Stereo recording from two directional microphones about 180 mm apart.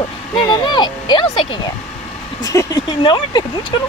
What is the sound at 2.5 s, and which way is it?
Speech, 25° left (ahead or behind).